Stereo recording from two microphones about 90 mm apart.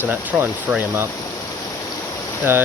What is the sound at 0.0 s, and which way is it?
Speech, 20° right (ahead or behind).